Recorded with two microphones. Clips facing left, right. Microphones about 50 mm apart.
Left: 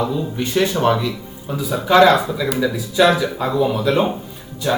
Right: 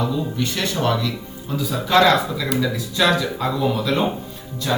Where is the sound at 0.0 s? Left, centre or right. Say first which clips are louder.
Left 2 dB; left.